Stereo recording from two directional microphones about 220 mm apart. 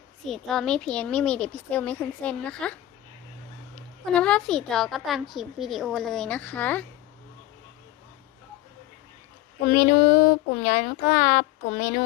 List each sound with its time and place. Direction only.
0.3 s a woman's voice: centre (ahead or behind)
3.8 s a woman's voice: 5° left (ahead or behind)
9.6 s speech: 45° left (ahead or behind)